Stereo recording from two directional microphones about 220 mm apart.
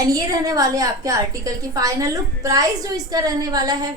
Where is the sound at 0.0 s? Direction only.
15° right (ahead or behind).